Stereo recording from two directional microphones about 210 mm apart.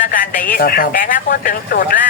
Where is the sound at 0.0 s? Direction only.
40° left (ahead or behind).